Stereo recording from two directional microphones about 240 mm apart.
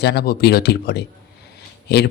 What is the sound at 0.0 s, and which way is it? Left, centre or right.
A man's voice, left.